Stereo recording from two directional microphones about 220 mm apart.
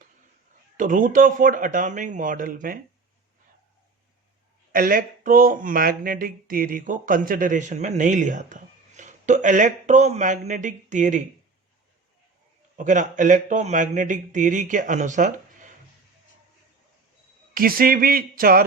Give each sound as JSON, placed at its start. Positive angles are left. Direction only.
{"t": 0.8, "sound": "speech", "side_deg": -35}
{"t": 4.7, "sound": "speech", "side_deg": -40}
{"t": 12.7, "sound": "speech", "side_deg": -35}
{"t": 17.5, "sound": "speech", "side_deg": -40}